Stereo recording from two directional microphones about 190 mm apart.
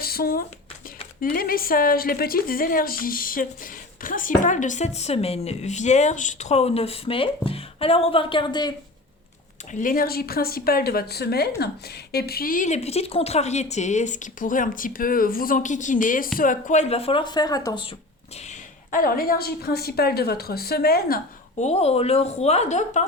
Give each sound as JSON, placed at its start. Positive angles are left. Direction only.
{"t": 0.0, "sound": "a sound", "side_deg": 50}
{"t": 1.2, "sound": "a woman's voice", "side_deg": 50}
{"t": 9.7, "sound": "a woman's voice", "side_deg": 45}
{"t": 18.4, "sound": "speech", "side_deg": 45}
{"t": 21.6, "sound": "a woman's voice", "side_deg": 35}